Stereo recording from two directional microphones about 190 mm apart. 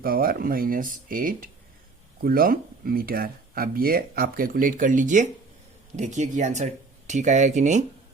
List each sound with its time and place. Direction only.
0.0 s speech: 50° right (ahead or behind)